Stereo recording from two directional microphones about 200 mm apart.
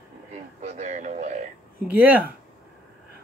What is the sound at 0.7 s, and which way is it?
Speech, 40° right (ahead or behind).